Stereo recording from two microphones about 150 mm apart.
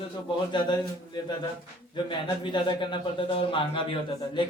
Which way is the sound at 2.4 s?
30° left (ahead or behind).